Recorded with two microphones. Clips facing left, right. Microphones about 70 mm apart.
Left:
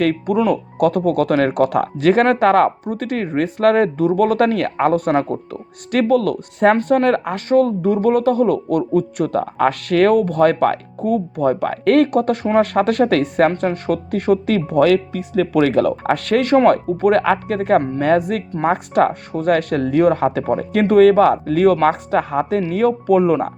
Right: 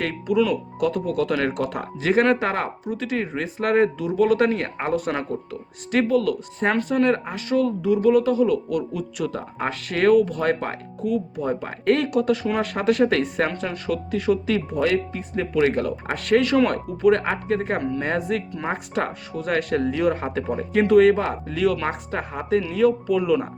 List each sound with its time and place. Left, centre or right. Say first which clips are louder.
0.0 s speech: left 5 dB; left
11.0 s speech: left 7 dB; left
21.8 s speech: left 10 dB; left